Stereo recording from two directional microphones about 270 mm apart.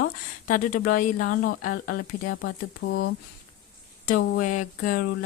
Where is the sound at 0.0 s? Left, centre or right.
Left.